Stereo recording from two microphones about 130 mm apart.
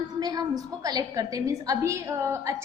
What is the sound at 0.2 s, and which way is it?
A woman's voice, 30° right (ahead or behind).